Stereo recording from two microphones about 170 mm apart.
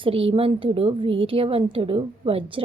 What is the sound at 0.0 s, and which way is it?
A woman's voice, 30° right (ahead or behind).